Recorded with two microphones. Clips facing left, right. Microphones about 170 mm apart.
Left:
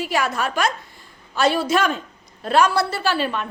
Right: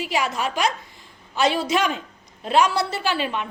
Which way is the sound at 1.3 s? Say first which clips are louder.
Left 2 dB; 15° right (ahead or behind).